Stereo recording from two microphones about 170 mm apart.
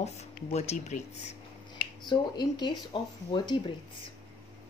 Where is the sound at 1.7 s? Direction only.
25° left (ahead or behind).